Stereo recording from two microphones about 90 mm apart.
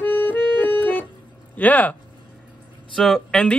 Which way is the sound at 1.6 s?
15° left (ahead or behind).